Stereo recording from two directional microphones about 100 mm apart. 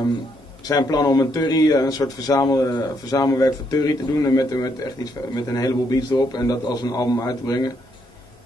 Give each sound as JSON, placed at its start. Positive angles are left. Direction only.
{"t": 0.7, "sound": "speech", "side_deg": 40}